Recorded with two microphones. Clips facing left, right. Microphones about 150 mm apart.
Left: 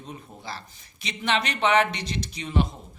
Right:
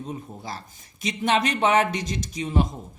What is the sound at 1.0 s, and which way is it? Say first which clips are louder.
Speech: right 4 dB; 45° right (ahead or behind).